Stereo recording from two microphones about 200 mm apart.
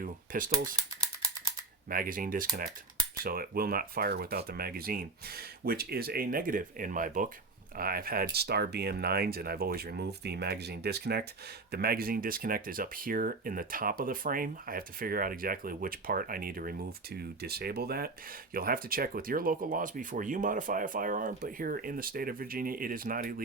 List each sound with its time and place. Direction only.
0.0 s cutlery: 45° right (ahead or behind)
0.8 s a sound: 20° right (ahead or behind)
1.9 s speech: 45° right (ahead or behind)